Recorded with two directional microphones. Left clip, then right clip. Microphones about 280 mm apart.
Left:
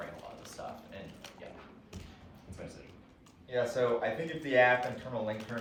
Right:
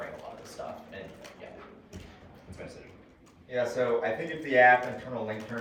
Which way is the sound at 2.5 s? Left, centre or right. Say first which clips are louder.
Right 3 dB; centre.